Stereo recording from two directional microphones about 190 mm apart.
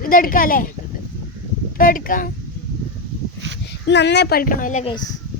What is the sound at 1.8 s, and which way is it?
Speech, 45° left (ahead or behind).